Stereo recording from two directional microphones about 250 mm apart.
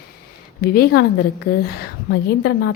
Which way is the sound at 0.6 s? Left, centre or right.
Left.